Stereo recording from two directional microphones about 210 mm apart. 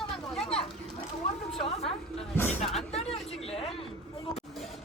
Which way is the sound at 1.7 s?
30° left (ahead or behind).